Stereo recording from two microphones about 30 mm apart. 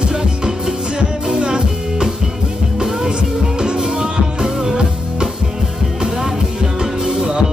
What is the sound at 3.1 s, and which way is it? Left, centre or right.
Music, right.